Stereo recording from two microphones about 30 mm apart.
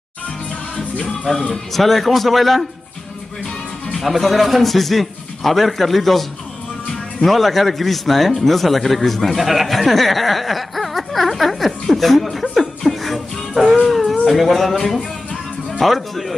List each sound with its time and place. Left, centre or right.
1.2 s speech: centre
1.7 s a man's voice: centre
4.2 s a man's voice: centre
7.2 s a man's voice: centre
11.9 s chuckle: centre
13.8 s a sound: centre
14.2 s a man's voice: centre
15.8 s a man's voice: centre